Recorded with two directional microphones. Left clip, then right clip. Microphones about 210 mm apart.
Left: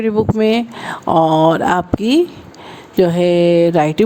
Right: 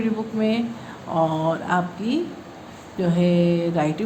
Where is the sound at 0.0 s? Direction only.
50° left (ahead or behind).